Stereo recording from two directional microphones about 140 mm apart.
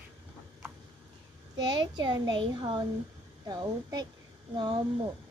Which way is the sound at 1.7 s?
35° right (ahead or behind).